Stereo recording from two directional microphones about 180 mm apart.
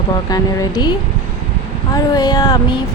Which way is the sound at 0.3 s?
20° left (ahead or behind).